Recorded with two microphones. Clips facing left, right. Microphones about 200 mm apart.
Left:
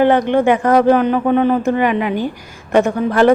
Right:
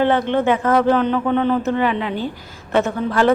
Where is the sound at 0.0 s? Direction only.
15° left (ahead or behind).